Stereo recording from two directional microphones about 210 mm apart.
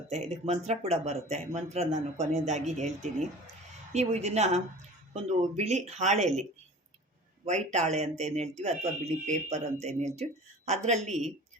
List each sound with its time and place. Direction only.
0.1 s speech: 30° right (ahead or behind)
7.4 s speech: 35° right (ahead or behind)